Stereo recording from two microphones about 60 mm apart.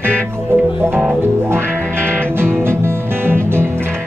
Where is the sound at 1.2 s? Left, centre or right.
Right.